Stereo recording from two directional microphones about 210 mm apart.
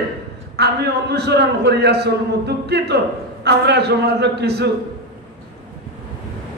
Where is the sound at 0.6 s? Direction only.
50° right (ahead or behind).